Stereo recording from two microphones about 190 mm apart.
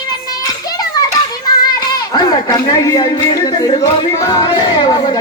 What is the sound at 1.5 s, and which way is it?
Child singing, 20° left (ahead or behind).